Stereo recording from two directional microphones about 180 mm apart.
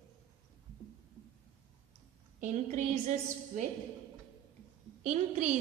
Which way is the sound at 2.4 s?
40° right (ahead or behind).